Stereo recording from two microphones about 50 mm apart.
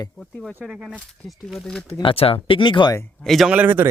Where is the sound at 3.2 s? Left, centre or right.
Centre.